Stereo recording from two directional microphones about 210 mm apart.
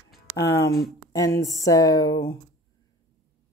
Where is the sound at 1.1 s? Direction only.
15° left (ahead or behind).